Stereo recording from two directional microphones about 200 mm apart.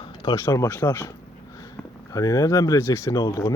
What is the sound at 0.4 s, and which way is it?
Speech, 15° left (ahead or behind).